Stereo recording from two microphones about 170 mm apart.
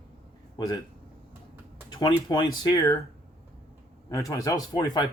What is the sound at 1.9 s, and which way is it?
Speech, 25° left (ahead or behind).